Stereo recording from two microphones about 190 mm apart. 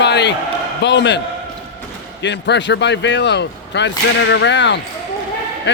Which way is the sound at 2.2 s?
70° left (ahead or behind).